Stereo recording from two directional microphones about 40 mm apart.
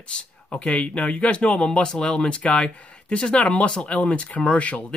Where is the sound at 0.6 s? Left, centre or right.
Left.